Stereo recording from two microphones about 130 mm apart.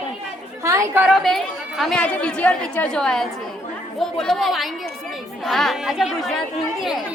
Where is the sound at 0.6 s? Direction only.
25° right (ahead or behind).